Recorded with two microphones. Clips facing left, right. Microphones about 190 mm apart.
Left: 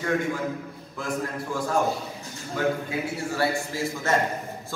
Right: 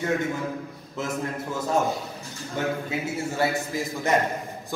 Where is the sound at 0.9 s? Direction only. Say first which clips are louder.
Right 1 dB; 25° right (ahead or behind).